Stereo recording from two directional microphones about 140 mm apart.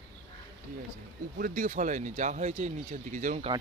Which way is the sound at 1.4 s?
65° right (ahead or behind).